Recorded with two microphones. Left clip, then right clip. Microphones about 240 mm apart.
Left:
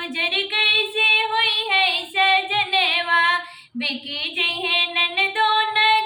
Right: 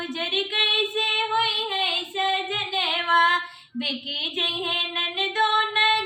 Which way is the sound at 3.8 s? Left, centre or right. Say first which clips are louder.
Left 2 dB; centre.